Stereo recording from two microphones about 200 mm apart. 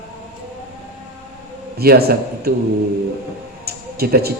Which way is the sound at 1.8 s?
50° right (ahead or behind).